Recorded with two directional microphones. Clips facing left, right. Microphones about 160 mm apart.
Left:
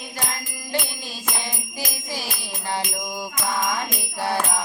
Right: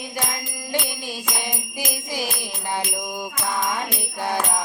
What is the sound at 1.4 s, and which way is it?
Jingle bell, 15° right (ahead or behind).